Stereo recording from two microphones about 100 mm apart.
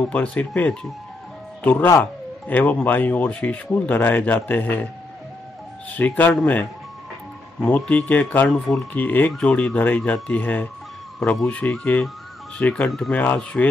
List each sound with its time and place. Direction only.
0.0 s speech: 15° left (ahead or behind)
1.6 s speech: 20° left (ahead or behind)
5.9 s speech: 20° left (ahead or behind)
8.5 s speech: centre (ahead or behind)
8.9 s speech: 20° left (ahead or behind)